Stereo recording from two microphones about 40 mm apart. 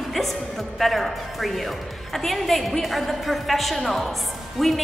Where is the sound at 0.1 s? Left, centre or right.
Centre.